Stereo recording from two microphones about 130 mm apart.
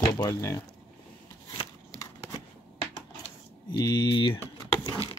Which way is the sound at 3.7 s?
30° left (ahead or behind).